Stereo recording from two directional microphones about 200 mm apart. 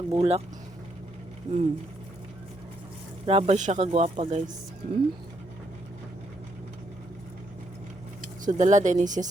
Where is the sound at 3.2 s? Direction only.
30° right (ahead or behind).